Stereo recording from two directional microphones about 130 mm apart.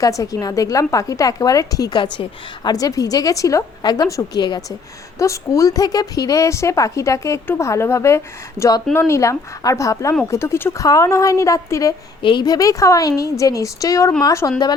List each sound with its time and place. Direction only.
0.0 s a woman's voice: 25° left (ahead or behind)
12.2 s a woman's voice: 35° left (ahead or behind)